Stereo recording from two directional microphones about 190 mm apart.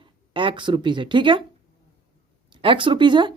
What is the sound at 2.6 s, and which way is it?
Speech, 25° right (ahead or behind).